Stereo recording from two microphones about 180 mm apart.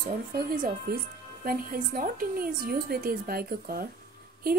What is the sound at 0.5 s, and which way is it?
A woman's voice, 50° right (ahead or behind).